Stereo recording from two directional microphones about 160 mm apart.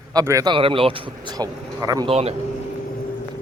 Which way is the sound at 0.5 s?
35° right (ahead or behind).